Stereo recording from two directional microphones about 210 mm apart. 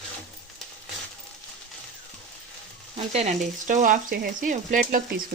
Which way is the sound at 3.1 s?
35° right (ahead or behind).